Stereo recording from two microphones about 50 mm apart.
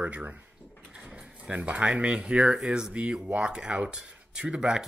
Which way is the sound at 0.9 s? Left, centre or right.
Centre.